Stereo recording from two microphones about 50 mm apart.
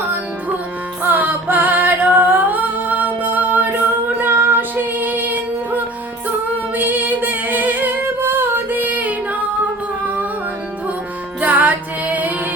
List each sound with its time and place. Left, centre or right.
1.0 s singing: right
4.2 s music: right
6.7 s singing: right
11.3 s music: right